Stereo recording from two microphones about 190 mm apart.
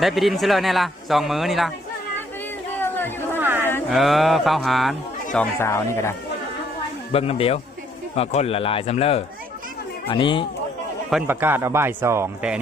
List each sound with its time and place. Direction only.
0.0 s speech: centre (ahead or behind)
2.7 s chatter: 10° left (ahead or behind)
3.3 s a sound: 10° right (ahead or behind)
3.6 s a sound: 10° left (ahead or behind)
3.8 s speech: centre (ahead or behind)
5.5 s speech: 15° left (ahead or behind)
7.1 s speech: 30° left (ahead or behind)
11.1 s speech: 10° right (ahead or behind)